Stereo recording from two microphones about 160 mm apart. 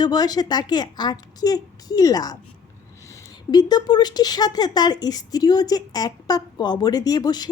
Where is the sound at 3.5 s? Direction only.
25° left (ahead or behind).